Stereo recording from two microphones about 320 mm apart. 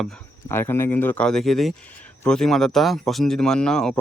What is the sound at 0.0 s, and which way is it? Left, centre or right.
Speech, centre.